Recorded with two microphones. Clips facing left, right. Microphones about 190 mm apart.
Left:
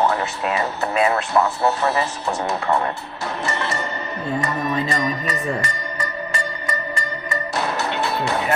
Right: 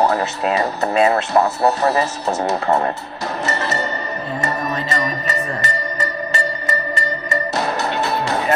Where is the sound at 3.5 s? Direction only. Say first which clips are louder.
Right 3 dB; 40° right (ahead or behind).